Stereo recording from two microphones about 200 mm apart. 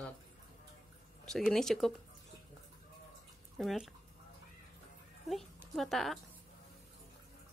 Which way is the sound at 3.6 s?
Centre (ahead or behind).